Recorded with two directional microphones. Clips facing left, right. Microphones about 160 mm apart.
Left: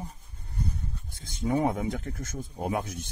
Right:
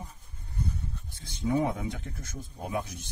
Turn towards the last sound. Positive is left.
turn(degrees=50)  # may be behind; listen again after turning